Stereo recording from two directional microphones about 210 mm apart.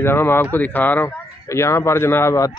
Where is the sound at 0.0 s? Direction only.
10° left (ahead or behind).